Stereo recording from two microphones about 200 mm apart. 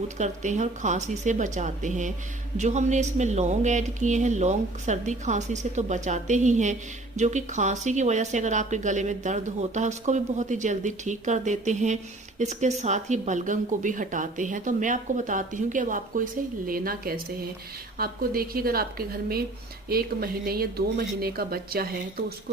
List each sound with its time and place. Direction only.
0.2 s speech: 35° right (ahead or behind)